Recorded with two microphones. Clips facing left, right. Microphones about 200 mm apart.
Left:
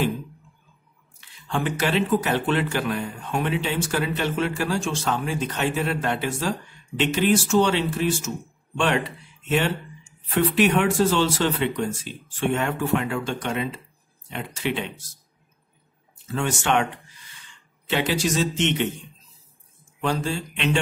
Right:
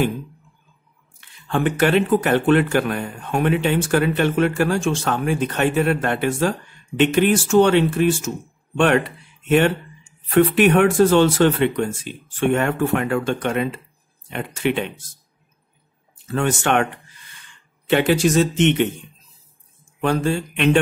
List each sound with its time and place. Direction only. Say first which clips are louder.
1.5 s speech: right 6 dB; 55° right (ahead or behind)
10.3 s speech: right 5 dB; 55° right (ahead or behind)
16.3 s speech: right 4 dB; 55° right (ahead or behind)
20.0 s speech: right 5 dB; 55° right (ahead or behind)